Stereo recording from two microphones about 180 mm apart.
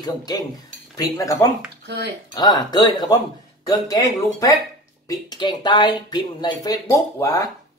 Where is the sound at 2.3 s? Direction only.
20° left (ahead or behind).